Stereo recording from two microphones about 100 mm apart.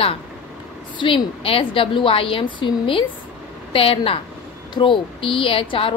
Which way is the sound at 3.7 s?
70° left (ahead or behind).